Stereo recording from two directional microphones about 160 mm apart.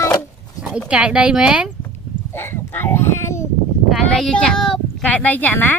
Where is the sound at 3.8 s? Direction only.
Centre (ahead or behind).